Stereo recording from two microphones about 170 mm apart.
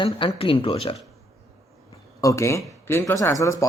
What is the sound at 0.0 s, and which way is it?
Speech, 30° left (ahead or behind).